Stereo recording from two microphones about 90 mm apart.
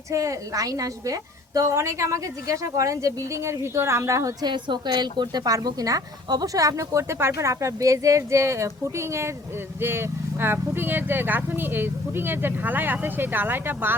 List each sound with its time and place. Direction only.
0.1 s a woman's voice: 35° right (ahead or behind)